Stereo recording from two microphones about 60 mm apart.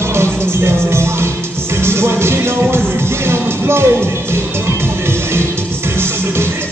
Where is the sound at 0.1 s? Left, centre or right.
Right.